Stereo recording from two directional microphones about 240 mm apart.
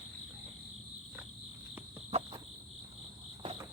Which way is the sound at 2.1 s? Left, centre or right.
Right.